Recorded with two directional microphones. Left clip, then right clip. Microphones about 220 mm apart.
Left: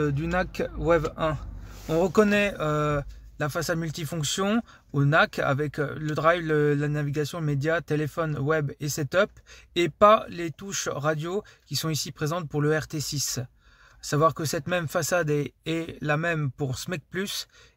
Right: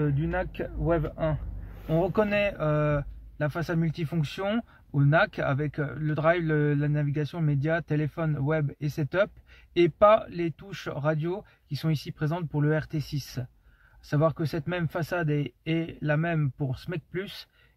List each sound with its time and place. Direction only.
0.0 s speech: 55° left (ahead or behind)